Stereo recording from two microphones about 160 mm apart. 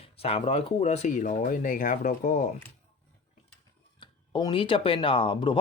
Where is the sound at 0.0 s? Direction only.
40° left (ahead or behind).